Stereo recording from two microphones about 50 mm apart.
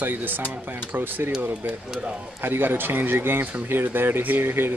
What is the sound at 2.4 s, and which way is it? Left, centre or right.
Speech, right.